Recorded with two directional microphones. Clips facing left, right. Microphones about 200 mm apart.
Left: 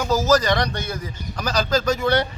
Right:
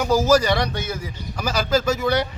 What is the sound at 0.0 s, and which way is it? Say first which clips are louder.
Speech: right 1 dB; 10° right (ahead or behind).